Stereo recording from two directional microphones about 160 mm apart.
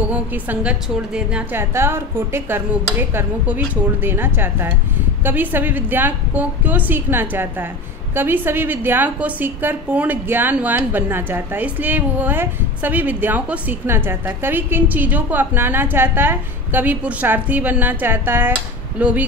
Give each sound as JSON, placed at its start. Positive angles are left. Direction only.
{"t": 0.1, "sound": "a woman's voice", "side_deg": -10}